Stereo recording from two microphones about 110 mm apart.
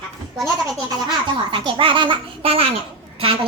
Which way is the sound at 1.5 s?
50° right (ahead or behind).